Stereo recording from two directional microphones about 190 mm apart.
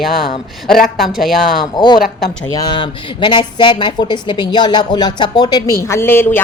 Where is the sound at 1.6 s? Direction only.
25° left (ahead or behind).